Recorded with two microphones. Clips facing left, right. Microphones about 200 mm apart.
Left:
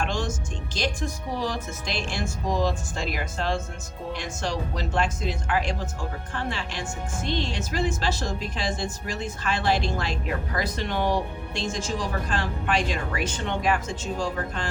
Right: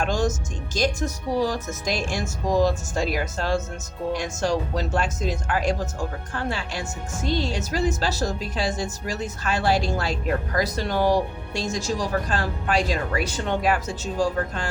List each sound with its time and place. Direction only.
0.0 s speech: 40° right (ahead or behind)